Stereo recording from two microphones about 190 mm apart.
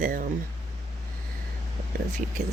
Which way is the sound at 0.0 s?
45° right (ahead or behind).